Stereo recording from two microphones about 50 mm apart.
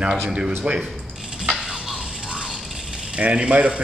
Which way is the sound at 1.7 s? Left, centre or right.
Centre.